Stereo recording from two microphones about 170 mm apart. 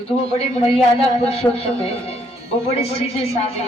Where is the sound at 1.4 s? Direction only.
15° left (ahead or behind).